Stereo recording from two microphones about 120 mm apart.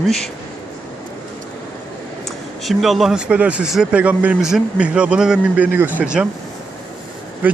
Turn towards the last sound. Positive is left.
turn(degrees=-15)  # may be behind; listen again after turning